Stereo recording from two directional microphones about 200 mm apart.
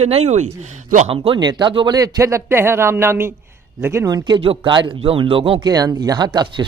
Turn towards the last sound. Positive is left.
turn(degrees=-20)  # may be behind; listen again after turning